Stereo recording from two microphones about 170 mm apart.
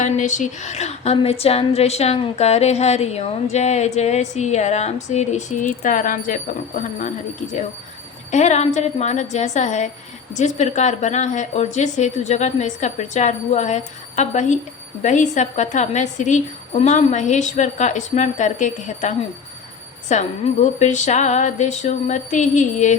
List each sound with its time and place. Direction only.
0.0 s a woman's voice: 45° left (ahead or behind)
8.3 s a woman's voice: 45° left (ahead or behind)